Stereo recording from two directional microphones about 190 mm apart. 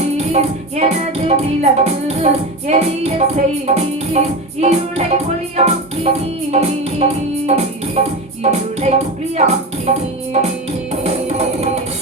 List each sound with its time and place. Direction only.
0.3 s music: 35° right (ahead or behind)
11.0 s music: 35° right (ahead or behind)